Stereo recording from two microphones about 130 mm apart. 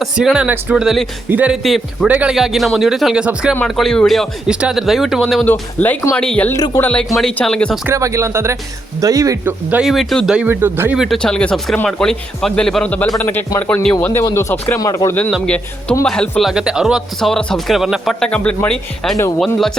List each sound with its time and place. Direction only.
0.0 s speech: centre (ahead or behind)
1.6 s speech: centre (ahead or behind)
2.0 s speech: 10° right (ahead or behind)
5.5 s speech: 15° left (ahead or behind)
6.5 s speech: 20° left (ahead or behind)
6.9 s speech: 5° left (ahead or behind)
7.9 s speech: 25° right (ahead or behind)
9.4 s speech: 15° right (ahead or behind)
9.8 s speech: centre (ahead or behind); by 10.9 s 15° right (ahead or behind)
10.9 s speech: centre (ahead or behind); by 15.1 s 25° left (ahead or behind)
15.4 s speech: 10° left (ahead or behind)